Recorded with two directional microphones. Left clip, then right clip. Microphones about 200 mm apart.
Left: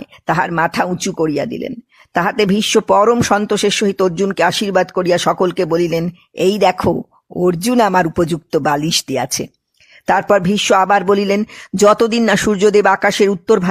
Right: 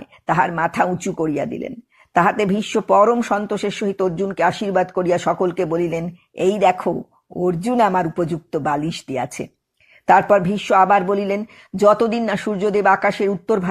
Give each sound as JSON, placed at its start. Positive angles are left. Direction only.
{"t": 0.0, "sound": "speech", "side_deg": 35}